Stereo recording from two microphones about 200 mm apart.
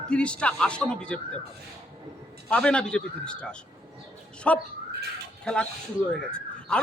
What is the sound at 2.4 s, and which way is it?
Speech, 5° left (ahead or behind).